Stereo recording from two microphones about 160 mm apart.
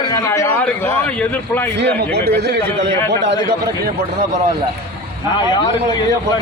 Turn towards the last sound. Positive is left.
turn(degrees=25)  # may be behind; listen again after turning